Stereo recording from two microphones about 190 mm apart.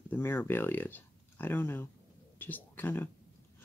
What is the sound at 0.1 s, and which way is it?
Speech, 10° left (ahead or behind).